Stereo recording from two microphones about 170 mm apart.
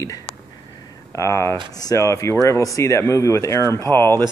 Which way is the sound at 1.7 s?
20° left (ahead or behind).